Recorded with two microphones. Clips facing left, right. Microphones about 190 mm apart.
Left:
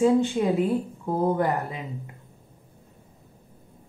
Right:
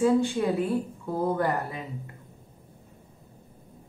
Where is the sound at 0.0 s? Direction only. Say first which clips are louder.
Left 2 dB; 20° left (ahead or behind).